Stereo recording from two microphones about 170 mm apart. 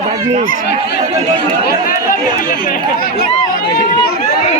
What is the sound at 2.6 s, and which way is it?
Speech, 60° left (ahead or behind).